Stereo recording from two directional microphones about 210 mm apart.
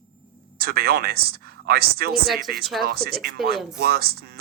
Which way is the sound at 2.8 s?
45° right (ahead or behind).